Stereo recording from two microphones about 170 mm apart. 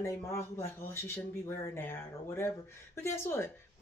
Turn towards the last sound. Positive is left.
turn(degrees=15)  # may be behind; listen again after turning